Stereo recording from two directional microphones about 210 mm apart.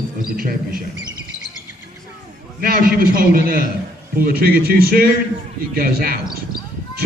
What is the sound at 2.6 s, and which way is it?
A man's voice, 45° right (ahead or behind).